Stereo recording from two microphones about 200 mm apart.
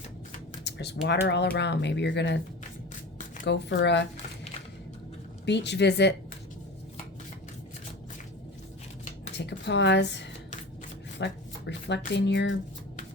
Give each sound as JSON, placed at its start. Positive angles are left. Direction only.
{"t": 0.6, "sound": "typing", "side_deg": 55}
{"t": 1.0, "sound": "speech", "side_deg": 60}
{"t": 3.4, "sound": "speech", "side_deg": 60}
{"t": 5.5, "sound": "speech", "side_deg": 60}
{"t": 9.4, "sound": "speech", "side_deg": 60}